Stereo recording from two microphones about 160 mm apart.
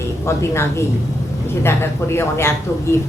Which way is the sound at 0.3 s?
15° left (ahead or behind).